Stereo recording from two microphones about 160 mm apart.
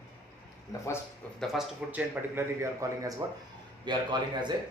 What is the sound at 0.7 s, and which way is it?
Speech, 20° left (ahead or behind).